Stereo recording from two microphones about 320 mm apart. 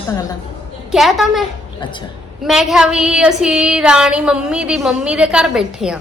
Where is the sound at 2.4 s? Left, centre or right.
Centre.